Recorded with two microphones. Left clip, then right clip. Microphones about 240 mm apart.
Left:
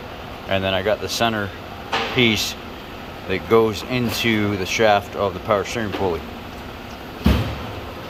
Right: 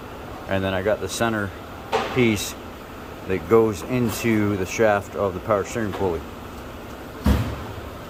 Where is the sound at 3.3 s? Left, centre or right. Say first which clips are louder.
Left 1 dB; centre.